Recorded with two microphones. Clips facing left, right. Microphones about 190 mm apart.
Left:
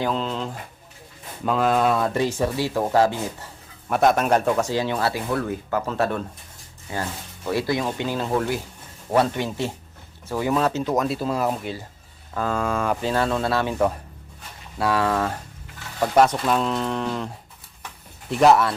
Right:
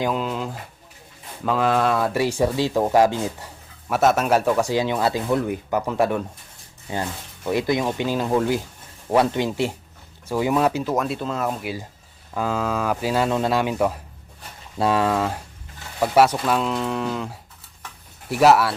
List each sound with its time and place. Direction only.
0.0 s speech: 10° right (ahead or behind)
3.8 s speech: 5° right (ahead or behind)
10.9 s speech: centre (ahead or behind)
11.6 s speech: 10° right (ahead or behind)
14.8 s speech: 20° right (ahead or behind)